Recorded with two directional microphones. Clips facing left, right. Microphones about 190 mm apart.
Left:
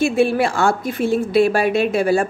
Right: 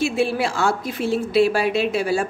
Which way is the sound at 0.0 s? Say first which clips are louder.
Left 4 dB; 55° left (ahead or behind).